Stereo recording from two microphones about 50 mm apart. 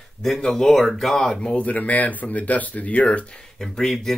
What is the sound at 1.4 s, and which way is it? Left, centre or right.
Speech, left.